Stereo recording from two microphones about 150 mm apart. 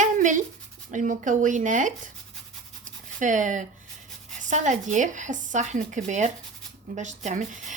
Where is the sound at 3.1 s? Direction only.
55° right (ahead or behind).